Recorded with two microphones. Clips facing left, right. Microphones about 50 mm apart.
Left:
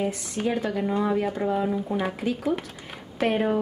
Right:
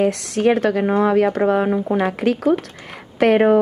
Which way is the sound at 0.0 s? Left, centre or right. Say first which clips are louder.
Right 10 dB; right.